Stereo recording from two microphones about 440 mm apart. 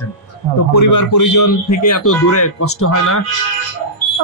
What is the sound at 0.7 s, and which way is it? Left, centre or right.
A man's voice, left.